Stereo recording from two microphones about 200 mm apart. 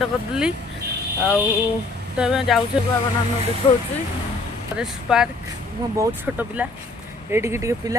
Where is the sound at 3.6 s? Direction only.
25° left (ahead or behind).